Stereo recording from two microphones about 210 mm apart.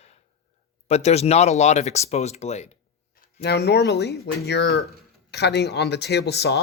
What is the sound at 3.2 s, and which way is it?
Speech, 50° left (ahead or behind).